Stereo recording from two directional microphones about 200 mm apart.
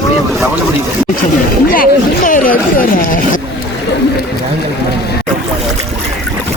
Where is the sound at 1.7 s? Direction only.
45° left (ahead or behind).